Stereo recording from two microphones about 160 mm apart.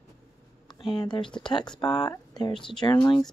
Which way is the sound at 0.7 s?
30° left (ahead or behind).